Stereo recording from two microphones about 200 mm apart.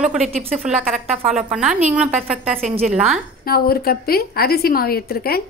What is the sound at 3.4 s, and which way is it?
A woman's voice, 50° left (ahead or behind).